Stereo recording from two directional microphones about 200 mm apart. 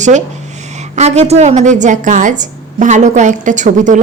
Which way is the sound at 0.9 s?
35° right (ahead or behind).